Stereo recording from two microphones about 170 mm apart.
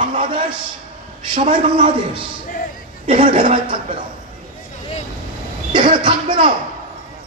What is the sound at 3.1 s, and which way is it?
Speech, 30° right (ahead or behind).